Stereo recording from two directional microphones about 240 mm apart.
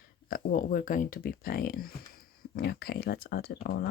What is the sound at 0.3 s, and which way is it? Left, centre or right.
Speech, left.